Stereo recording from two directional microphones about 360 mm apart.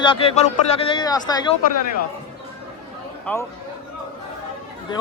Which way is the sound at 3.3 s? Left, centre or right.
Centre.